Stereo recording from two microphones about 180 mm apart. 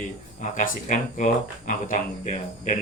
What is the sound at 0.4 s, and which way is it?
Speech, 45° left (ahead or behind).